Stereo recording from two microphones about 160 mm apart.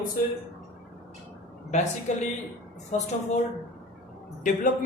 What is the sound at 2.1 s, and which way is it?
Speech, 50° left (ahead or behind).